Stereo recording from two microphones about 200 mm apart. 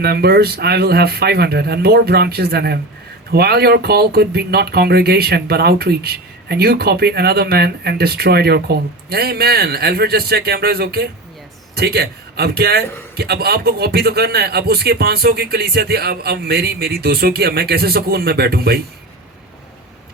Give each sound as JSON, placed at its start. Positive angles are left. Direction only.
{"t": 0.0, "sound": "speech", "side_deg": -50}